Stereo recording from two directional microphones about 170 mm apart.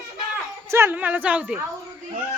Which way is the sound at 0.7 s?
15° right (ahead or behind).